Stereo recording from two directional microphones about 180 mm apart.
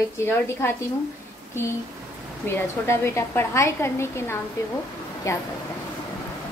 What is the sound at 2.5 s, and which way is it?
A woman's voice, 15° left (ahead or behind).